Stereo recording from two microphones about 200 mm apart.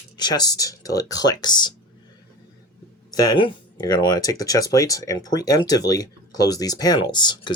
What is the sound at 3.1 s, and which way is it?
Speech, 20° left (ahead or behind).